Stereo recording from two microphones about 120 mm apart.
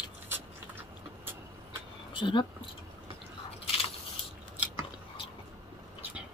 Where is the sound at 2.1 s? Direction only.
40° left (ahead or behind).